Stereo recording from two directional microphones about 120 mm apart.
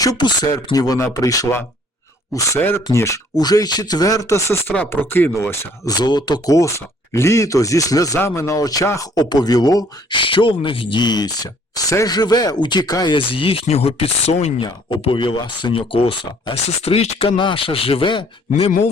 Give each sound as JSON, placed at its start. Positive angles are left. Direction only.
{"t": 0.0, "sound": "speech", "side_deg": 35}
{"t": 6.0, "sound": "speech", "side_deg": 35}
{"t": 14.6, "sound": "speech", "side_deg": 45}
{"t": 18.5, "sound": "speech", "side_deg": 60}